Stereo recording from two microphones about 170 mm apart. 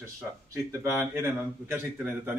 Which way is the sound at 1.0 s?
15° right (ahead or behind).